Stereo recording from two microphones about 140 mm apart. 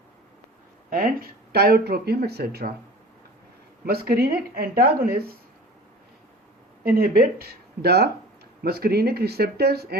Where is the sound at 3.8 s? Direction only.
90° right.